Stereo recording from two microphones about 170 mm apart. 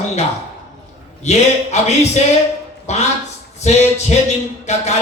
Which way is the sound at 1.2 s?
40° left (ahead or behind).